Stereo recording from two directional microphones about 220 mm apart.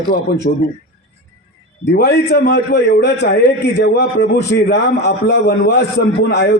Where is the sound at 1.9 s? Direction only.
50° left (ahead or behind).